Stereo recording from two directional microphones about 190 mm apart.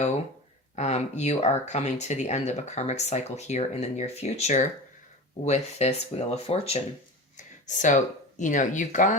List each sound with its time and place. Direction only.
0.8 s speech: 35° left (ahead or behind)
7.3 s a sound: 40° left (ahead or behind)
8.4 s speech: 40° left (ahead or behind)